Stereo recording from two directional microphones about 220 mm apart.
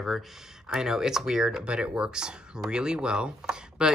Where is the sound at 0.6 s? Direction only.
Centre (ahead or behind).